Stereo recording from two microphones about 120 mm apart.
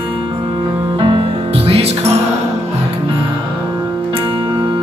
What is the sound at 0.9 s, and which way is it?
Music, 50° right (ahead or behind).